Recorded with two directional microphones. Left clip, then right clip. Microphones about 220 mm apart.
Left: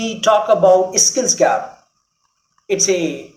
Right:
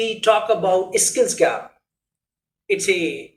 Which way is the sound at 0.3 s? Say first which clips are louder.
Left 6 dB; 25° left (ahead or behind).